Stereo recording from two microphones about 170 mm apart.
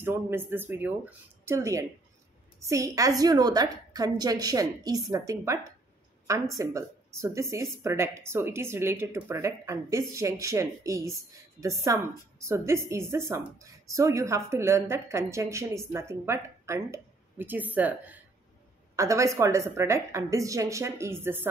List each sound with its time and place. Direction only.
0.0 s a woman's voice: 15° right (ahead or behind)